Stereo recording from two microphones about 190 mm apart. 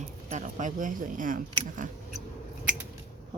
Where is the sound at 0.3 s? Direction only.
40° right (ahead or behind).